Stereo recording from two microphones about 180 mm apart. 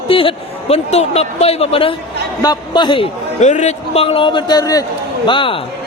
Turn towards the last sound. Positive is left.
turn(degrees=30)  # may be behind; listen again after turning